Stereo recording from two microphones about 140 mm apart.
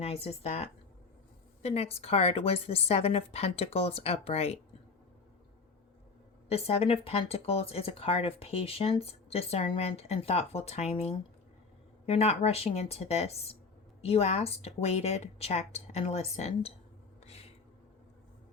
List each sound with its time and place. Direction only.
0.0 s speech: 45° left (ahead or behind)
6.5 s speech: 45° left (ahead or behind)